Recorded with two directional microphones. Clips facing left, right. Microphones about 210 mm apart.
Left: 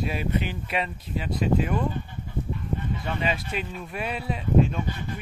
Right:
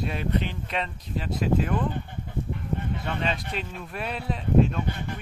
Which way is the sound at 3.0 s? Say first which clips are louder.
Left 1 dB; 5° left (ahead or behind).